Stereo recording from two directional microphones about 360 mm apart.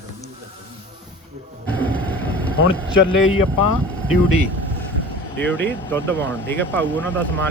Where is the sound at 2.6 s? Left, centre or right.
Left.